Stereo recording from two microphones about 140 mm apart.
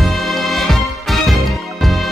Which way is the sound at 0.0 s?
Centre (ahead or behind).